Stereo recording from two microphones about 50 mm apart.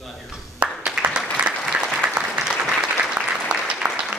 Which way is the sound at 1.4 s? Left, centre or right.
Right.